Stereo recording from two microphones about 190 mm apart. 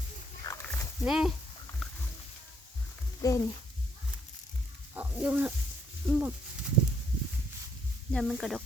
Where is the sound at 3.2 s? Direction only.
20° left (ahead or behind).